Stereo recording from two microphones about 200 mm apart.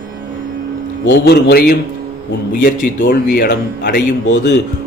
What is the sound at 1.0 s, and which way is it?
A man's voice, 55° left (ahead or behind).